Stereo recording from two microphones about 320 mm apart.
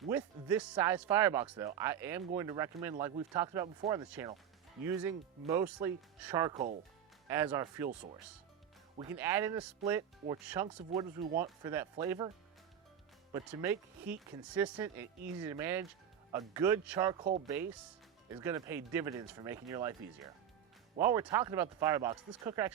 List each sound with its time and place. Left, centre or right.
0.1 s speech: centre
4.1 s speech: centre
9.0 s speech: centre
13.3 s speech: centre
21.0 s speech: centre